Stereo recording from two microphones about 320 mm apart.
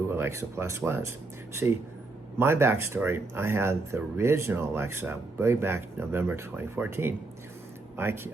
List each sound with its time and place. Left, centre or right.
0.1 s speech: centre
2.4 s speech: centre